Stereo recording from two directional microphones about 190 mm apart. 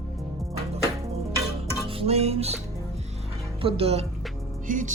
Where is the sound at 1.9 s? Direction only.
30° right (ahead or behind).